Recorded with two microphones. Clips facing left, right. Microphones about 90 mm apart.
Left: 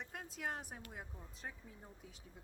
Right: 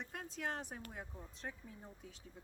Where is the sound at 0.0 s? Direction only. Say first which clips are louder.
Right 1 dB; 5° left (ahead or behind).